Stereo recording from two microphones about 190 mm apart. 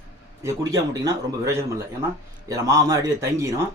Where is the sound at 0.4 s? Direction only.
15° right (ahead or behind).